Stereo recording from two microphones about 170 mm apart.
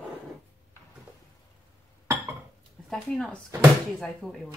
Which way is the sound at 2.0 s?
15° right (ahead or behind).